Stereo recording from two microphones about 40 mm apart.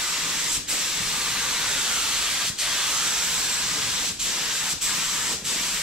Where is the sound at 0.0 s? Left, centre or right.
Centre.